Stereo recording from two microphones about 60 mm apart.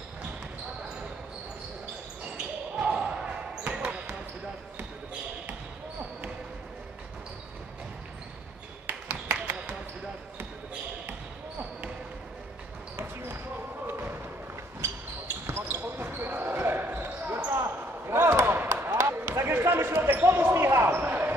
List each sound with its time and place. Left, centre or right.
2.3 s basketball bounce: centre
12.9 s basketball bounce: right
15.4 s basketball bounce: right